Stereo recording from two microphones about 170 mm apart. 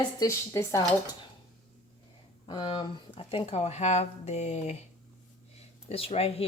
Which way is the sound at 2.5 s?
25° left (ahead or behind).